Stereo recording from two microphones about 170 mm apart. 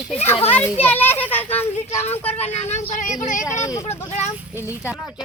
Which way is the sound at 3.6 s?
15° left (ahead or behind).